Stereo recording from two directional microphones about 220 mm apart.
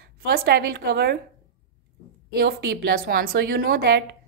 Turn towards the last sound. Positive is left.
turn(degrees=-50)  # may be behind; listen again after turning